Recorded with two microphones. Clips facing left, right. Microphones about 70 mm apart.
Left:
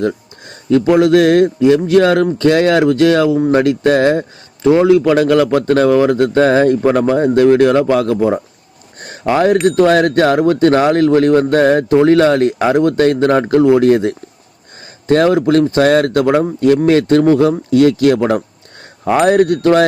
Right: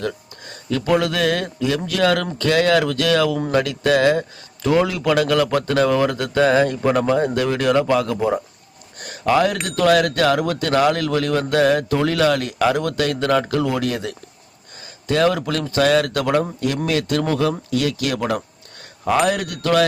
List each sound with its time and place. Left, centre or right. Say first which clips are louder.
0.0 s a man's voice: left 8 dB; left
9.0 s a sound: left 3 dB; left
9.6 s a man's voice: left 6 dB; left